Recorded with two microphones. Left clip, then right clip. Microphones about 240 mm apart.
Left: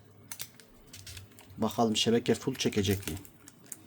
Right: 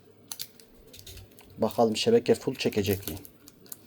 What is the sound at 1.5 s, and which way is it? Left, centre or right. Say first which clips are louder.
Speech: right 4 dB; left.